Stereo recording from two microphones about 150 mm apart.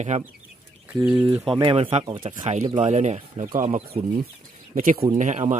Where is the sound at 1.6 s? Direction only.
35° right (ahead or behind).